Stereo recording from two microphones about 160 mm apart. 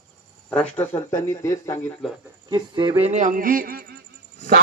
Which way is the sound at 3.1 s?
50° right (ahead or behind).